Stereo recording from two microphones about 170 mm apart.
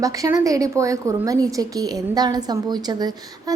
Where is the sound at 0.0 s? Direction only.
20° right (ahead or behind).